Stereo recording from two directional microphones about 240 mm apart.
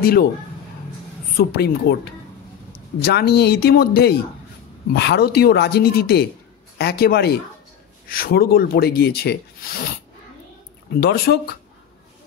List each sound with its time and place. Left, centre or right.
0.0 s speech: left
1.4 s speech: left
3.0 s speech: left
10.9 s speech: left